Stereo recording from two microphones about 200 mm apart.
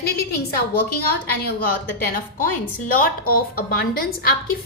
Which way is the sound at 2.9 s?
45° left (ahead or behind).